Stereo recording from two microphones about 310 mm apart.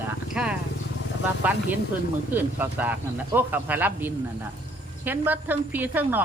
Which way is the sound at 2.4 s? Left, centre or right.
Centre.